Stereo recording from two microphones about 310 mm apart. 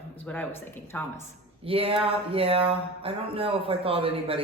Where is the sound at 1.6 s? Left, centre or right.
Centre.